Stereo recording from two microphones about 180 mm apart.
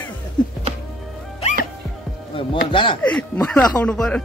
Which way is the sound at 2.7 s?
25° left (ahead or behind).